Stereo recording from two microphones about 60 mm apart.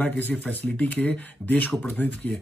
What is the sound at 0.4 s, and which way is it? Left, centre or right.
Speech, left.